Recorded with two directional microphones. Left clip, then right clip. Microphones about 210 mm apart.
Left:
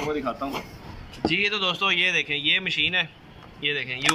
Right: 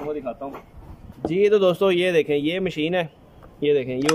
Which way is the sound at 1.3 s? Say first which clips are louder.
Right 7 dB; 60° right (ahead or behind).